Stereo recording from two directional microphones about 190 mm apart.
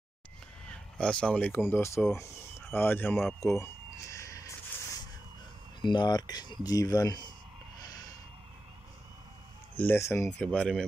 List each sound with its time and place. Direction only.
0.7 s speech: 5° left (ahead or behind)
3.4 s a sound: 15° left (ahead or behind)
5.8 s speech: 25° left (ahead or behind)
7.8 s snort: 20° left (ahead or behind)
9.8 s speech: 10° left (ahead or behind)